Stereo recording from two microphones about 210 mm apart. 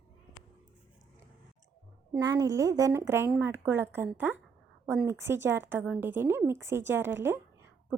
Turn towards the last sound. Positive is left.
turn(degrees=-10)  # may be behind; listen again after turning